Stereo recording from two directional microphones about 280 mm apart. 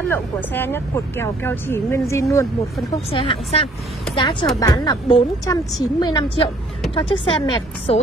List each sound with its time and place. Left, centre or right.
0.1 s a woman's voice: centre